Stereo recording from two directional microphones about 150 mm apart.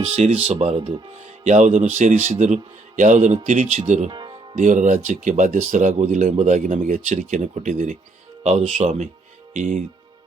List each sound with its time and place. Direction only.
0.0 s a man's voice: 45° right (ahead or behind)
4.1 s music: 30° right (ahead or behind)
4.5 s a man's voice: 55° right (ahead or behind)